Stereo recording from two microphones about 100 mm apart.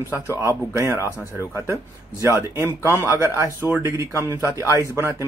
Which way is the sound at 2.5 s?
25° right (ahead or behind).